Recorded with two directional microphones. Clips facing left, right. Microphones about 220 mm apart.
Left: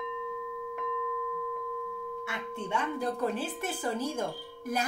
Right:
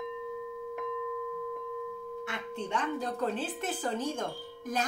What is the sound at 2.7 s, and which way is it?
Speech, 10° left (ahead or behind).